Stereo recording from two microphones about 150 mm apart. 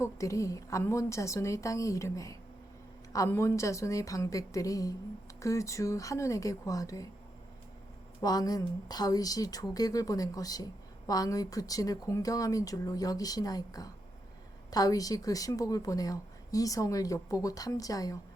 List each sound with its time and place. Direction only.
0.0 s a woman's voice: 20° left (ahead or behind)
8.2 s a woman's voice: 25° left (ahead or behind)